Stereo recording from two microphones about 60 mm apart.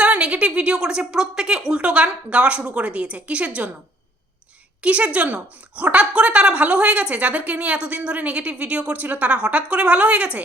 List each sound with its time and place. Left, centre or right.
0.0 s a woman's voice: right
4.8 s a woman's voice: right